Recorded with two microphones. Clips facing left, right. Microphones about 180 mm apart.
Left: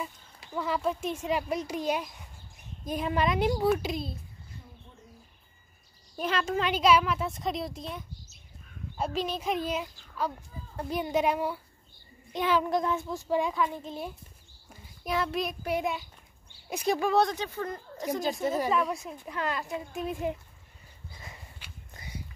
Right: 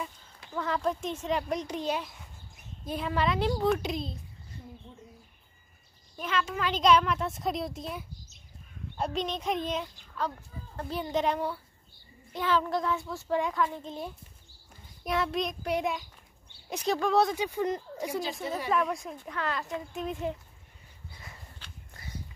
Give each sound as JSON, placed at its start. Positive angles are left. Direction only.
{"t": 0.6, "sound": "a child's voice", "side_deg": 10}
{"t": 3.6, "sound": "speech", "side_deg": 5}
{"t": 6.1, "sound": "a child's voice", "side_deg": 40}
{"t": 6.7, "sound": "a child's voice", "side_deg": 5}
{"t": 17.4, "sound": "speech", "side_deg": -15}
{"t": 18.7, "sound": "a child's voice", "side_deg": 5}
{"t": 21.5, "sound": "walk", "side_deg": 15}